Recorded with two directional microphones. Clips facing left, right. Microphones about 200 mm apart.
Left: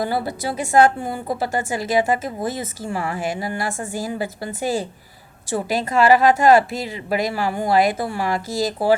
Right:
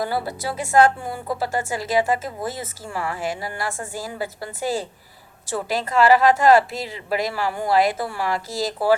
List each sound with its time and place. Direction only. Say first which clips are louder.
0.0 s a woman's voice: left 2 dB; 20° left (ahead or behind)